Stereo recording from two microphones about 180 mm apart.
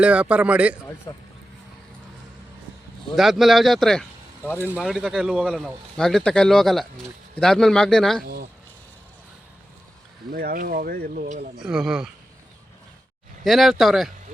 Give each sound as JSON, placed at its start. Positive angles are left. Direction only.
{"t": 0.0, "sound": "a man's voice", "side_deg": -5}
{"t": 1.1, "sound": "speech", "side_deg": 20}
{"t": 3.2, "sound": "speech", "side_deg": 0}
{"t": 4.5, "sound": "speech", "side_deg": -10}
{"t": 10.3, "sound": "speech", "side_deg": -55}
{"t": 11.6, "sound": "speech", "side_deg": -5}
{"t": 13.4, "sound": "speech", "side_deg": 0}